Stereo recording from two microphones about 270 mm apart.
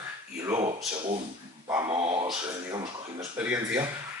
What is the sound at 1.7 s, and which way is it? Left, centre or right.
Speech, centre.